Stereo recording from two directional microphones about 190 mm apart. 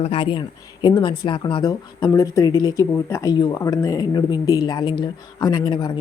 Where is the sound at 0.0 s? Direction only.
30° left (ahead or behind).